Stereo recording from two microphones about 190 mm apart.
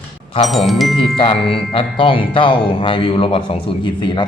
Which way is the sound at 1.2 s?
30° left (ahead or behind).